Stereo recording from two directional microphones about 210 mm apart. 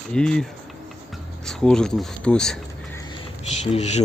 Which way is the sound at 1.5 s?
5° left (ahead or behind).